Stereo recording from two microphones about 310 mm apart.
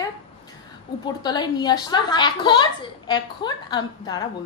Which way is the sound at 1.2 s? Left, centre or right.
Centre.